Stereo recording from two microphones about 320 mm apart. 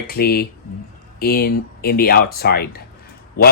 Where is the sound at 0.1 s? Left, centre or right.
Left.